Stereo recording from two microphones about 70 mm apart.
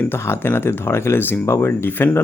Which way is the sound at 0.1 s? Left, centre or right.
Left.